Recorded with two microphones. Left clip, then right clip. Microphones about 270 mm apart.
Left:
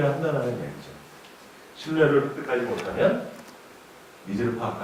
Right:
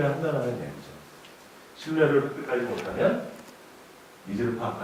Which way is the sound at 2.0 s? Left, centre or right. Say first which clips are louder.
Left 2 dB; centre.